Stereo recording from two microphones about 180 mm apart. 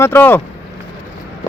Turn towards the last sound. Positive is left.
turn(degrees=10)  # may be behind; listen again after turning